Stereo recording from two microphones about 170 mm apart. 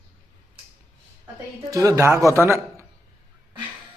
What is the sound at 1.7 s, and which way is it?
A man's voice, 20° right (ahead or behind).